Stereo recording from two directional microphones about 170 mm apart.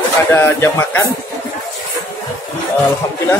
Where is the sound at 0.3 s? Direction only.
15° left (ahead or behind).